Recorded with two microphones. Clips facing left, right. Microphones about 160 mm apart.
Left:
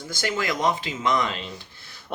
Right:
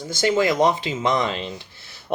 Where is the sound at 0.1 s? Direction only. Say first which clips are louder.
Right 8 dB; 20° right (ahead or behind).